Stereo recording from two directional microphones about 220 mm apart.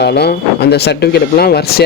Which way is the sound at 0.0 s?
45° left (ahead or behind).